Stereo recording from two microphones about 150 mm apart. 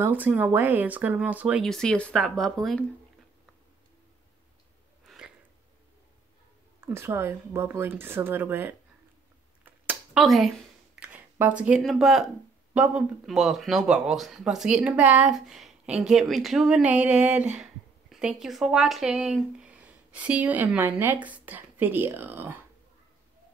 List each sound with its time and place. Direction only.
0.0 s speech: 10° right (ahead or behind)
1.6 s speech: 5° left (ahead or behind)
5.0 s a sound: 5° right (ahead or behind)
6.8 s speech: 15° right (ahead or behind)
10.1 s speech: centre (ahead or behind)